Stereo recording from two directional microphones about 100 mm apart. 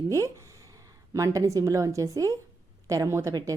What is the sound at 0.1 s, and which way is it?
Speech, 30° right (ahead or behind).